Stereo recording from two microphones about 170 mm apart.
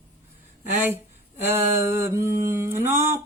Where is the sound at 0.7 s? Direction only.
10° right (ahead or behind).